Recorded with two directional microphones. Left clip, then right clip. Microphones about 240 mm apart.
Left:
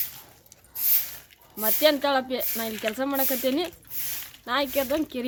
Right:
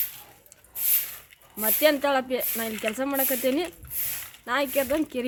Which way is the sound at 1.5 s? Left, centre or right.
Centre.